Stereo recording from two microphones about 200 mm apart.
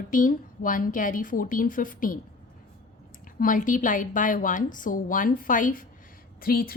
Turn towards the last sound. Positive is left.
turn(degrees=50)  # may be behind; listen again after turning